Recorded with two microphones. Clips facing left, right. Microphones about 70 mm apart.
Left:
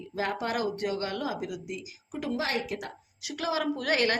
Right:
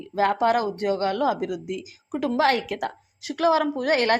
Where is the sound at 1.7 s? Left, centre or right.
Right.